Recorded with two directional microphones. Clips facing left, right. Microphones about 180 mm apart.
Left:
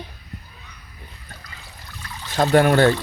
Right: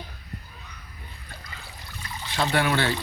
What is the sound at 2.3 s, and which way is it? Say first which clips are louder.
Speech: left 8 dB; 45° left (ahead or behind).